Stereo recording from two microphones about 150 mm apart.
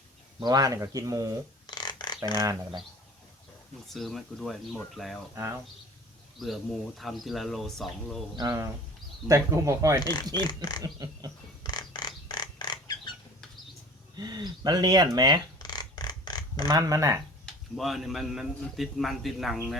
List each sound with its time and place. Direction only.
0.3 s speech: 25° right (ahead or behind)
1.6 s a sound: 30° left (ahead or behind)
2.4 s speech: 30° right (ahead or behind)
3.8 s a man's voice: centre (ahead or behind)
5.3 s speech: 15° right (ahead or behind)
6.4 s a man's voice: centre (ahead or behind)
8.4 s speech: 20° right (ahead or behind)
10.0 s a sound: 25° left (ahead or behind)
10.8 s speech: 25° right (ahead or behind)
11.6 s a sound: 30° left (ahead or behind)
14.2 s speech: 25° right (ahead or behind)
15.5 s a sound: 25° left (ahead or behind)
16.6 s speech: 20° right (ahead or behind)
17.4 s a man's voice: centre (ahead or behind)